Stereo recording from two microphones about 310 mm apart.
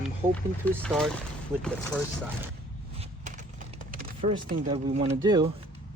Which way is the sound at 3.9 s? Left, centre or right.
Right.